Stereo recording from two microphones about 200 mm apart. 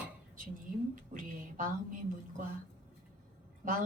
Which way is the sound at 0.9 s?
40° right (ahead or behind).